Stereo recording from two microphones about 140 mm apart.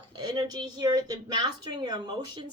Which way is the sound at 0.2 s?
30° right (ahead or behind).